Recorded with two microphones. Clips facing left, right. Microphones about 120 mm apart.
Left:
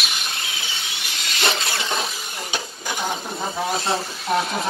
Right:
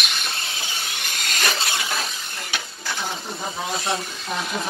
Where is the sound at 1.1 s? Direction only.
50° right (ahead or behind).